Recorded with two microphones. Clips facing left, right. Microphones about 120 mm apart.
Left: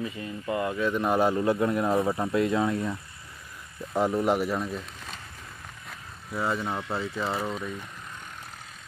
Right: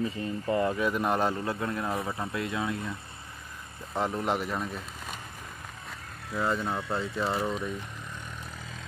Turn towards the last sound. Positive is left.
turn(degrees=0)  # may be behind; listen again after turning